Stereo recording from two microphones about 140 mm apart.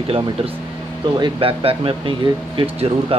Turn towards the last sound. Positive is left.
turn(degrees=-40)  # may be behind; listen again after turning